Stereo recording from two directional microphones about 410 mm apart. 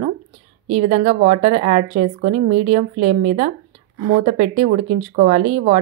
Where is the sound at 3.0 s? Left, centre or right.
Right.